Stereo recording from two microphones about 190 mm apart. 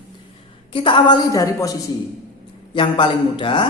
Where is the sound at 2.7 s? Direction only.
25° left (ahead or behind).